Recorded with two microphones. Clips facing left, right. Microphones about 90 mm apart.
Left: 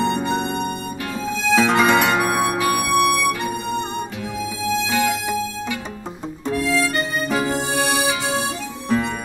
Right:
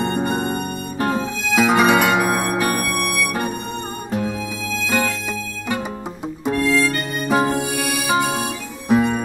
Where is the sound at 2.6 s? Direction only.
40° right (ahead or behind).